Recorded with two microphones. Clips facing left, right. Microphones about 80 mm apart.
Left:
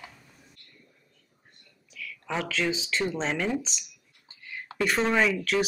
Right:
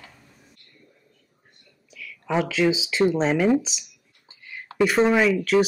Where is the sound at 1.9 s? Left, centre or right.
Centre.